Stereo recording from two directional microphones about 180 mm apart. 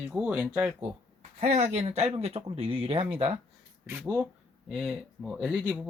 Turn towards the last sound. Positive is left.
turn(degrees=-5)  # may be behind; listen again after turning